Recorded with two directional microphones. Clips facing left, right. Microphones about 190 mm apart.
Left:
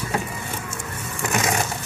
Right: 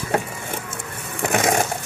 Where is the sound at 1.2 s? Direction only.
60° right (ahead or behind).